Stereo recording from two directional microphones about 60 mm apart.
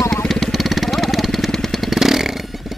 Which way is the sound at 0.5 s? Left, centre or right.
Centre.